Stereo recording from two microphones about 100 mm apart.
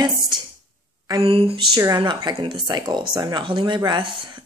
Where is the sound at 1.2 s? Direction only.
65° right (ahead or behind).